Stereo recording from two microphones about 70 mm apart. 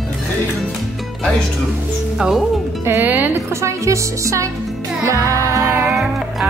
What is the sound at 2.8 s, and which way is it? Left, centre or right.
Speech, right.